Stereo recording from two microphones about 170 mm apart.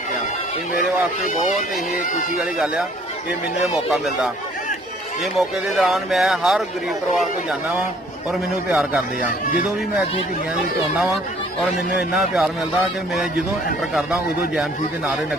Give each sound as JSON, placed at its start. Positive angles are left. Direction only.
{"t": 0.7, "sound": "speech", "side_deg": 50}
{"t": 2.4, "sound": "speech", "side_deg": -5}
{"t": 3.9, "sound": "speech", "side_deg": 0}
{"t": 5.4, "sound": "speech", "side_deg": 0}
{"t": 8.7, "sound": "speech", "side_deg": -10}
{"t": 12.1, "sound": "speech", "side_deg": 0}
{"t": 13.9, "sound": "speech", "side_deg": -5}